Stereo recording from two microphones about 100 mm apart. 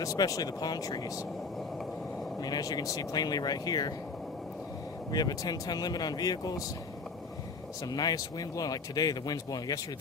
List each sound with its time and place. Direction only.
0.0 s speech: 35° left (ahead or behind)
2.4 s speech: 40° left (ahead or behind)
5.1 s speech: 40° left (ahead or behind)
7.9 s speech: 40° left (ahead or behind)